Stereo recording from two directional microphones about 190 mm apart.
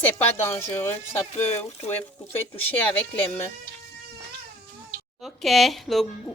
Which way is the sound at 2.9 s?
10° left (ahead or behind).